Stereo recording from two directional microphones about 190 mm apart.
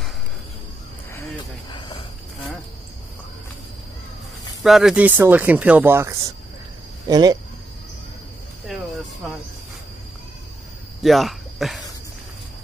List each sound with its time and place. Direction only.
1.7 s cricket: 25° left (ahead or behind)
4.6 s speech: centre (ahead or behind); by 7.3 s 20° right (ahead or behind)
8.6 s a sound: centre (ahead or behind)
11.0 s cricket: centre (ahead or behind)